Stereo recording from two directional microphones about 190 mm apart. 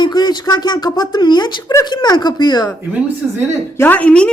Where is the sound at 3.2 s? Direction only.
5° right (ahead or behind).